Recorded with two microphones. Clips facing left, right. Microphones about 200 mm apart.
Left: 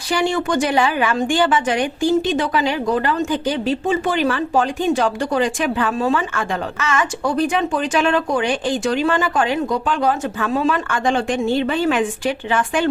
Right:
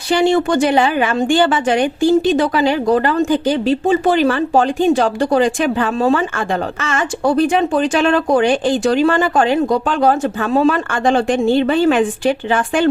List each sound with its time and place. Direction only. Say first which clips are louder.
0.1 s a woman's voice: right 5 dB; 25° right (ahead or behind)